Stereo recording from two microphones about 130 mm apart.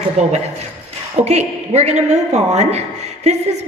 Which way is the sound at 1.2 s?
60° right (ahead or behind).